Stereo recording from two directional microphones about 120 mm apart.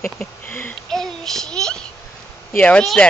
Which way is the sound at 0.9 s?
5° left (ahead or behind).